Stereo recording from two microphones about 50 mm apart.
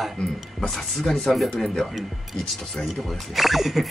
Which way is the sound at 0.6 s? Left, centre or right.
Centre.